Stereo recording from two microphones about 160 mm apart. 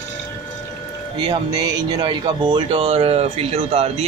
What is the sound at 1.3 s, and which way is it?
Speech, 25° right (ahead or behind).